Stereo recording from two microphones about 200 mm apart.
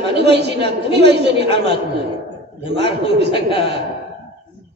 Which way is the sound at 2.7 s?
55° right (ahead or behind).